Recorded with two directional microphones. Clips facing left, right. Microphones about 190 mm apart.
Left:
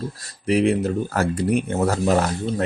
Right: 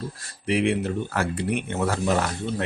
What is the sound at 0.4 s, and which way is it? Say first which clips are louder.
Speech: left 4 dB; 40° left (ahead or behind).